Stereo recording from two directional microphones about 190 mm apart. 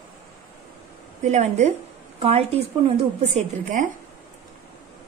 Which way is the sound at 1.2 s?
40° right (ahead or behind).